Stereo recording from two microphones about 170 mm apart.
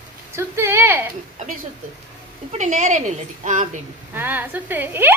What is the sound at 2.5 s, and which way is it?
A woman's voice, 45° right (ahead or behind).